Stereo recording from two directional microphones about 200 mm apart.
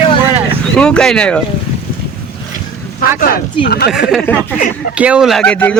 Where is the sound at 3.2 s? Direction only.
45° left (ahead or behind).